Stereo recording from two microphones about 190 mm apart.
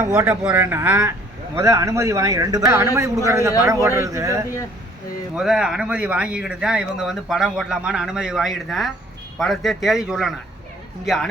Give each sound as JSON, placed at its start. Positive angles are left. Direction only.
{"t": 0.1, "sound": "speech", "side_deg": -5}
{"t": 5.3, "sound": "speech", "side_deg": -5}